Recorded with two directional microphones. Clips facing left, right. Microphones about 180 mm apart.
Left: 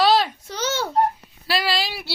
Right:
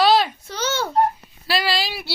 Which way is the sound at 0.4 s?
15° left (ahead or behind).